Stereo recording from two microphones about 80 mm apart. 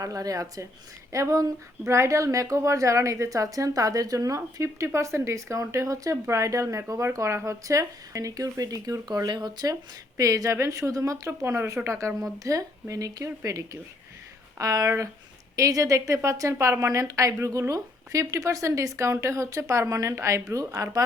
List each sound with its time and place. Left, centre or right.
0.0 s a woman's voice: right
9.3 s speech: right
10.2 s a woman's voice: right